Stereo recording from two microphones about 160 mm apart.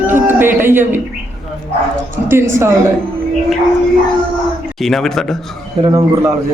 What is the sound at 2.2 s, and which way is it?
Speech, 15° right (ahead or behind).